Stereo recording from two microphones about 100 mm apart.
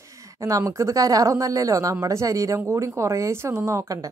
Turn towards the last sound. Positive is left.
turn(degrees=-30)  # may be behind; listen again after turning